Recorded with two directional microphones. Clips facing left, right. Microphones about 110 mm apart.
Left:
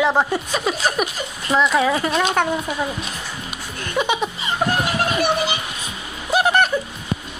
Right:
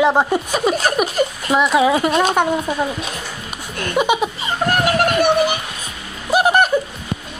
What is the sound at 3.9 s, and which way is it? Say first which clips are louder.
Speech: right 4 dB; 10° right (ahead or behind).